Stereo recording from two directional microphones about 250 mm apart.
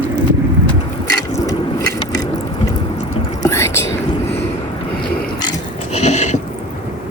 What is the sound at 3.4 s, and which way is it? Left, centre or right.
Whispering, centre.